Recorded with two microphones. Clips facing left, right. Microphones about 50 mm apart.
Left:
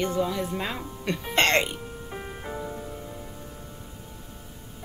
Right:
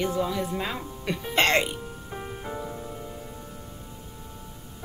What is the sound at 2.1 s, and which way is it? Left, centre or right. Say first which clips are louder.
Music: right 1 dB; centre.